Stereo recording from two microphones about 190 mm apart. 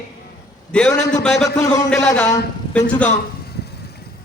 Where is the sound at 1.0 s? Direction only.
40° left (ahead or behind).